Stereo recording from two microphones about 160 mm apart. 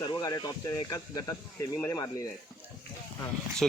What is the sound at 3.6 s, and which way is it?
Speech, centre (ahead or behind).